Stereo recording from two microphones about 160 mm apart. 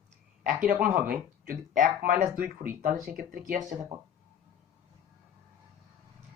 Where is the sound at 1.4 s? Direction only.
55° right (ahead or behind).